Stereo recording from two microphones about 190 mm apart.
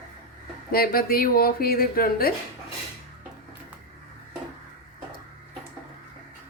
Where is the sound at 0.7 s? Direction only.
50° left (ahead or behind).